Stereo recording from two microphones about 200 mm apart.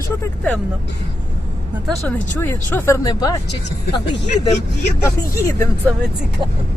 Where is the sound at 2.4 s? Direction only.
10° left (ahead or behind).